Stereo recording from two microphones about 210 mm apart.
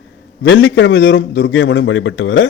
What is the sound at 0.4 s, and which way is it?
A man's voice, 65° left (ahead or behind).